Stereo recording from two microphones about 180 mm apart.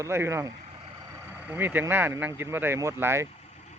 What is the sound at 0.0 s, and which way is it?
Speech, 15° right (ahead or behind).